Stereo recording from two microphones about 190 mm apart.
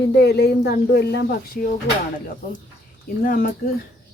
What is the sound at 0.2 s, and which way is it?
Speech, 60° left (ahead or behind).